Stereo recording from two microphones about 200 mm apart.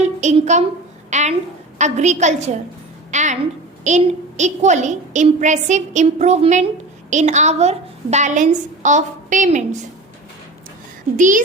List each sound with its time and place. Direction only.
0.0 s a woman's voice: 35° right (ahead or behind)
11.2 s a woman's voice: 40° right (ahead or behind)